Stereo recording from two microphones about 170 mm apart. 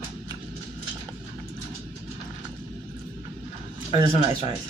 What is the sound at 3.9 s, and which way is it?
Speech, 35° left (ahead or behind).